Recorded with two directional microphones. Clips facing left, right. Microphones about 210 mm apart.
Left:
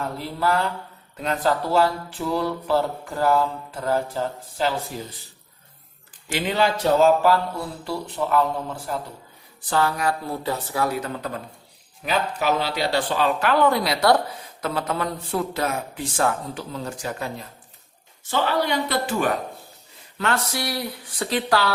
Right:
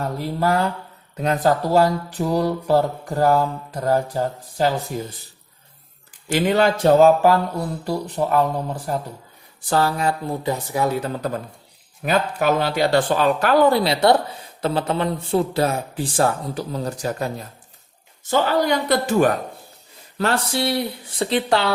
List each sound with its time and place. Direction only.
0.0 s speech: 40° right (ahead or behind)
6.2 s speech: 45° right (ahead or behind)
9.6 s speech: 35° right (ahead or behind)
12.0 s speech: 45° right (ahead or behind)
20.1 s speech: 35° right (ahead or behind)